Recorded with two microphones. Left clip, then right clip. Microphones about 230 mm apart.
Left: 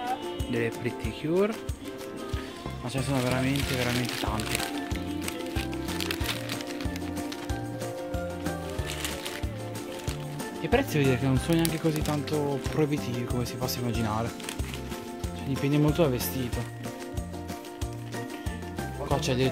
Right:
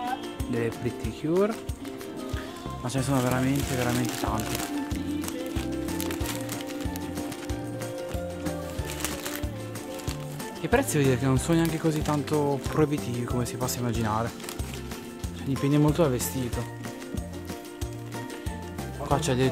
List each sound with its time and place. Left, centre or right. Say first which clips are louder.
0.5 s speech: right 1 dB; centre
2.9 s speech: right 2 dB; centre
10.7 s speech: right 1 dB; centre
15.6 s speech: right 1 dB; centre
19.0 s speech: right 2 dB; centre